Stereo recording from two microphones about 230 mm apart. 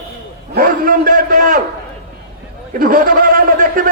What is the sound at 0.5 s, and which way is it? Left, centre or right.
A man's voice, right.